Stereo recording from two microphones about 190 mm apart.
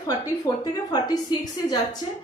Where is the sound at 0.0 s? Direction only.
20° left (ahead or behind).